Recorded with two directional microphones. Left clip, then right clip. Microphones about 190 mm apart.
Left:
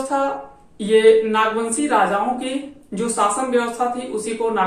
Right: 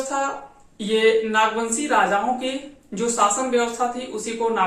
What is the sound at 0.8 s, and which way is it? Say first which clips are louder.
Speech: left 5 dB; centre (ahead or behind).